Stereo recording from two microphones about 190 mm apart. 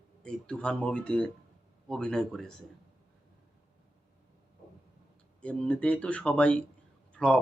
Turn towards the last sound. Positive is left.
turn(degrees=5)  # may be behind; listen again after turning